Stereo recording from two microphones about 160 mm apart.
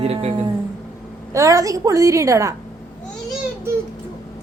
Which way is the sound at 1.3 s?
20° right (ahead or behind).